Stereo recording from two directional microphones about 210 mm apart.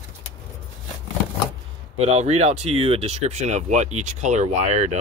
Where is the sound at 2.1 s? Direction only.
30° right (ahead or behind).